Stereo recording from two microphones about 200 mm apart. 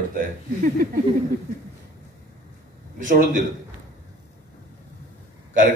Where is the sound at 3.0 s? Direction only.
40° right (ahead or behind).